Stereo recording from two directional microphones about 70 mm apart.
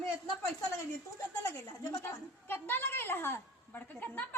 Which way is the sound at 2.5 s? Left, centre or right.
Left.